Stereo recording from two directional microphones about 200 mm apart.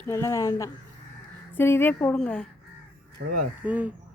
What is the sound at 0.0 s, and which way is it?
A woman's voice, 15° left (ahead or behind).